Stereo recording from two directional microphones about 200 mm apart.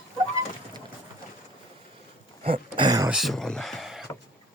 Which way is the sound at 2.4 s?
25° right (ahead or behind).